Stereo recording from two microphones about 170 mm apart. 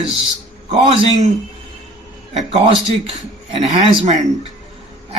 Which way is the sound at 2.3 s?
40° right (ahead or behind).